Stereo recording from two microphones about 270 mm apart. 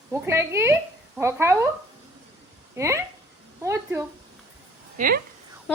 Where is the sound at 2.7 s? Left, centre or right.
Centre.